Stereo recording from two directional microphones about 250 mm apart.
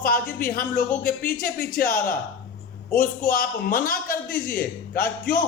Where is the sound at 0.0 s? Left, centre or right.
Left.